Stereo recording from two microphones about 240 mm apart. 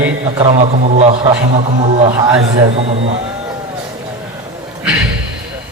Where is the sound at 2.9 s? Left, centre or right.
Right.